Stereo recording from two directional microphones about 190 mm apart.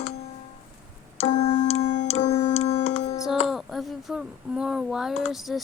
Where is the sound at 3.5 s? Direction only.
Centre (ahead or behind).